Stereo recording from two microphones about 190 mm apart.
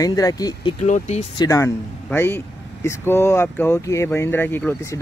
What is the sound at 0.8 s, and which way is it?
Speech, 40° left (ahead or behind).